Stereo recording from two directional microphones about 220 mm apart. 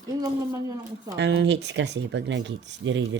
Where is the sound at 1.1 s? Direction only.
55° right (ahead or behind).